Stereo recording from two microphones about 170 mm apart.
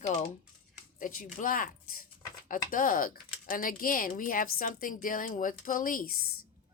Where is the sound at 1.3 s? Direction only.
55° left (ahead or behind).